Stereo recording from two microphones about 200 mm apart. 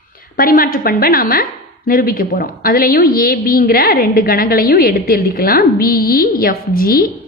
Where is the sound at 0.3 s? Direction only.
45° left (ahead or behind).